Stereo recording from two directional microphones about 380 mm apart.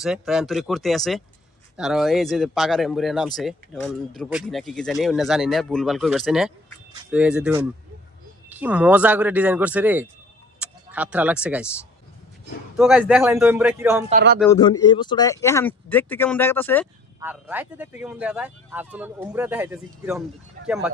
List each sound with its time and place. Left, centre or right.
0.0 s speech: centre
12.7 s speech: centre
14.1 s a man's voice: right
14.5 s speech: centre